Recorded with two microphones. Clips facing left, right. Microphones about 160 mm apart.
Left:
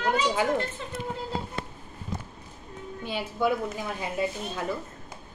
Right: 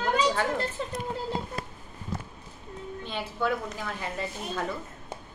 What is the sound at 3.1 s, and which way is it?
A woman's voice, 10° left (ahead or behind).